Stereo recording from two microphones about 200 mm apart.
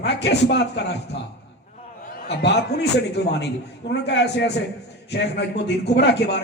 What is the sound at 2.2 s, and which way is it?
A man's voice, 60° left (ahead or behind).